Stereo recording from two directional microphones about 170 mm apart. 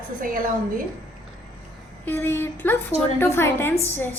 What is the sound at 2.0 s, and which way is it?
Speech, 15° left (ahead or behind).